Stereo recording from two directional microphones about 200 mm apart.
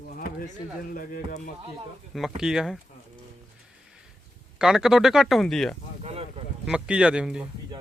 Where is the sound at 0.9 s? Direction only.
45° left (ahead or behind).